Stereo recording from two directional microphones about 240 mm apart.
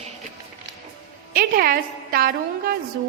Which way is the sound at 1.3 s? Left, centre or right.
Right.